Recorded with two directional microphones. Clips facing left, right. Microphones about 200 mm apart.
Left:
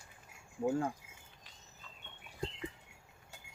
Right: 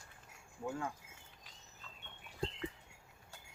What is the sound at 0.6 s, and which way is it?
Speech, 35° left (ahead or behind).